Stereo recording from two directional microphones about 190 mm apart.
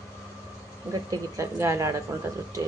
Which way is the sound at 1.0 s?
15° right (ahead or behind).